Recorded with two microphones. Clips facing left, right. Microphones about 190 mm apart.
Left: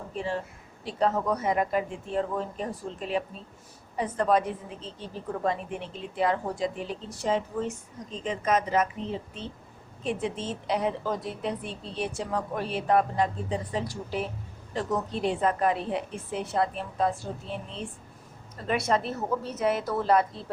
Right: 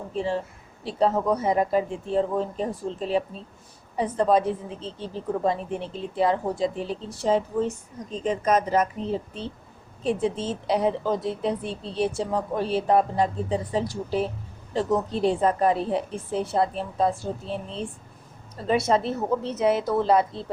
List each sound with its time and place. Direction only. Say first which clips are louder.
0.1 s a woman's voice: right 5 dB; 30° right (ahead or behind)